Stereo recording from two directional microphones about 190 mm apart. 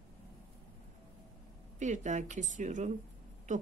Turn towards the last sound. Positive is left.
turn(degrees=-40)  # may be behind; listen again after turning